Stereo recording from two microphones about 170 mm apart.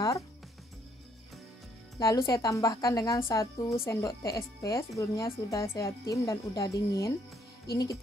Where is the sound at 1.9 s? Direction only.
20° left (ahead or behind).